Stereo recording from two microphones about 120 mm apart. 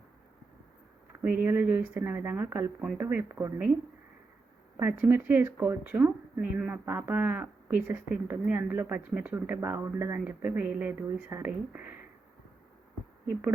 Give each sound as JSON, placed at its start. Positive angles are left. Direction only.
{"t": 1.2, "sound": "speech", "side_deg": -15}
{"t": 4.8, "sound": "speech", "side_deg": -15}